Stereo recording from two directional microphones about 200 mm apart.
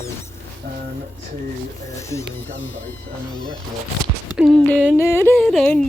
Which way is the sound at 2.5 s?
70° left (ahead or behind).